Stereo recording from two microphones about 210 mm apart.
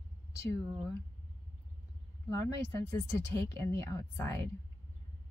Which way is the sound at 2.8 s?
10° left (ahead or behind).